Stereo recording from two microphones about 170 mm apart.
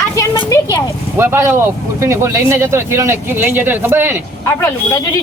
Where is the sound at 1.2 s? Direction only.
15° right (ahead or behind).